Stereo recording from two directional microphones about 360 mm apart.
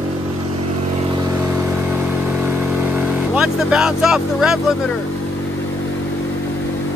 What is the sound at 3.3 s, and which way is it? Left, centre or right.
Speech, centre.